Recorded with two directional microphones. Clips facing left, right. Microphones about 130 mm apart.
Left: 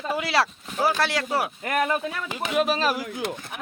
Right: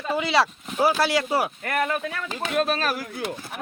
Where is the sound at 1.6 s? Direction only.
20° left (ahead or behind).